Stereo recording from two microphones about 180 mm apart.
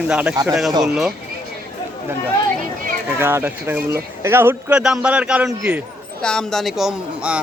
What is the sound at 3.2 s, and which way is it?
Speech, 10° right (ahead or behind).